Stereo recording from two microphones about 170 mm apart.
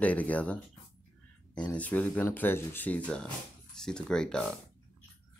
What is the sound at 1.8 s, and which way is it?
Speech, 10° left (ahead or behind).